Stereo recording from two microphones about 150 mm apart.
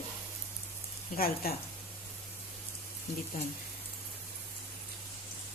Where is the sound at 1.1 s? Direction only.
80° left.